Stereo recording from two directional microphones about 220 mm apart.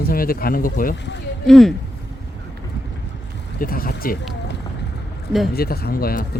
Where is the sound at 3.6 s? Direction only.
40° left (ahead or behind).